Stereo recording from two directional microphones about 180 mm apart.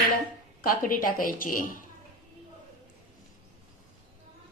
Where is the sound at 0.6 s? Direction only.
50° left (ahead or behind).